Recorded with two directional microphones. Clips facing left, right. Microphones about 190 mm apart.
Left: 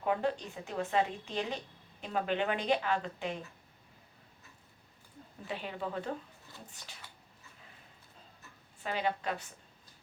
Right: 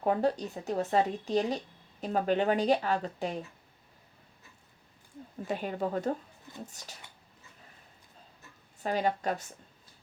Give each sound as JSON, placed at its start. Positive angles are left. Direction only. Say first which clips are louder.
{"t": 0.0, "sound": "speech", "louder": "right 4 dB", "side_deg": -40}
{"t": 5.5, "sound": "speech", "louder": "right 6 dB", "side_deg": -45}
{"t": 8.8, "sound": "speech", "louder": "right 5 dB", "side_deg": -40}